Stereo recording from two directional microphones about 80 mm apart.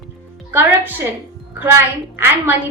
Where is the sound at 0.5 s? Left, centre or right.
Right.